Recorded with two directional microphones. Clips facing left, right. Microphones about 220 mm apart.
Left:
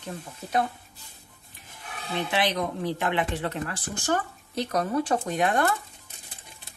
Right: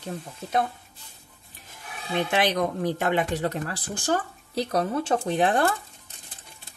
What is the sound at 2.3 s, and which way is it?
Speech, 45° right (ahead or behind).